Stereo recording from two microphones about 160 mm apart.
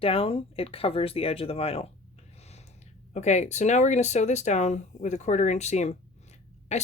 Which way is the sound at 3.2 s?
45° left (ahead or behind).